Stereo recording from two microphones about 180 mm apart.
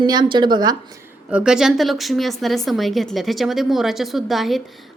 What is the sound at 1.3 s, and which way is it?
Speech, 5° right (ahead or behind).